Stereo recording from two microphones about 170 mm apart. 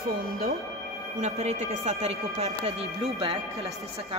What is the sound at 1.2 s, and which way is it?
Speech, 40° right (ahead or behind).